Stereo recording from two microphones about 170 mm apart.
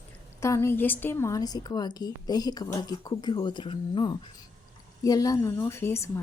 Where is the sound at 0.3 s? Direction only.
15° left (ahead or behind).